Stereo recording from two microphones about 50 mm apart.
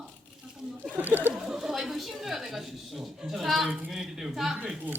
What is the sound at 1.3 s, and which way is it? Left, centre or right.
A woman's voice, centre.